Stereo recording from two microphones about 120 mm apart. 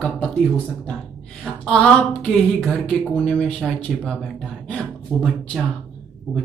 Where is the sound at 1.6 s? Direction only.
5° left (ahead or behind).